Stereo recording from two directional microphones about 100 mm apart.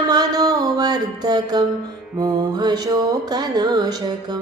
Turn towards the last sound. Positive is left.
turn(degrees=-45)  # may be behind; listen again after turning